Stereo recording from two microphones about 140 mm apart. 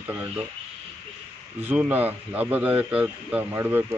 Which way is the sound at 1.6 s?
10° right (ahead or behind).